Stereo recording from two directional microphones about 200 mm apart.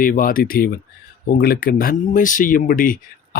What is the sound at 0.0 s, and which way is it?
Speech, 45° left (ahead or behind).